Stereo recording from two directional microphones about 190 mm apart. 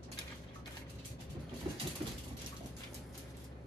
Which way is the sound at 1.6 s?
20° right (ahead or behind).